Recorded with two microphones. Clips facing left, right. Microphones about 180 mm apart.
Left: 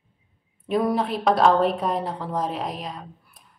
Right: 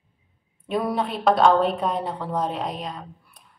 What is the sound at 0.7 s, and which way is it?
A woman's voice, centre (ahead or behind).